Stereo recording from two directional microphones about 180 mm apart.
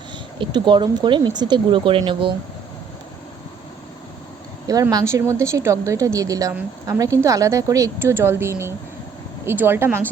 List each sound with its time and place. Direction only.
0.3 s speech: 25° right (ahead or behind)
4.6 s a woman's voice: 20° right (ahead or behind)